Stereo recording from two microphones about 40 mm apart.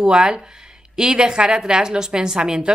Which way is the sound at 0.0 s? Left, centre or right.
Centre.